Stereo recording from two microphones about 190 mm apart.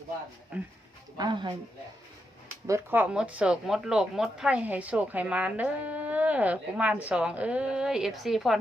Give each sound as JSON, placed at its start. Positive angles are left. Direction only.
{"t": 1.1, "sound": "speech", "side_deg": -20}
{"t": 2.6, "sound": "speech", "side_deg": -10}